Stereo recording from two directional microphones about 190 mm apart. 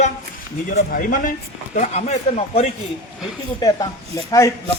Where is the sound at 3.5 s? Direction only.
20° left (ahead or behind).